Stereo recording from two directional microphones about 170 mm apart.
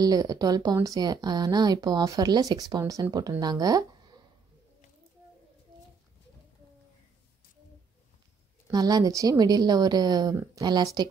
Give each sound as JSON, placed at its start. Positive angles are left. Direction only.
{"t": 0.0, "sound": "speech", "side_deg": -20}
{"t": 8.7, "sound": "speech", "side_deg": -20}